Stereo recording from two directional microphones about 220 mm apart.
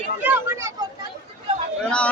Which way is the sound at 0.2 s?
10° right (ahead or behind).